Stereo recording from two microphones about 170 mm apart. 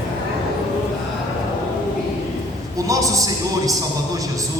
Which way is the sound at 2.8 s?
20° right (ahead or behind).